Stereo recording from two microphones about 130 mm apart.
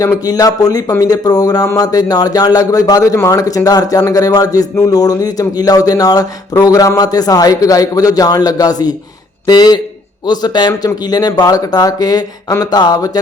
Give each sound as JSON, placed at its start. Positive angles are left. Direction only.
{"t": 0.0, "sound": "speech", "side_deg": 30}